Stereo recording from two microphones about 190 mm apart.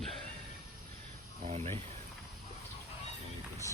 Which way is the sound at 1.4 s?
35° right (ahead or behind).